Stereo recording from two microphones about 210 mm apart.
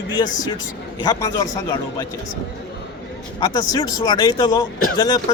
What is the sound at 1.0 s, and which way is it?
Speech, 15° left (ahead or behind).